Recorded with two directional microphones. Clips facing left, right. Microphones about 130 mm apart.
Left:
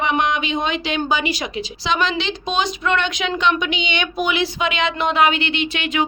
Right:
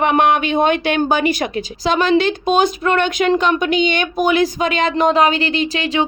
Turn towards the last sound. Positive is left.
turn(degrees=-35)  # may be behind; listen again after turning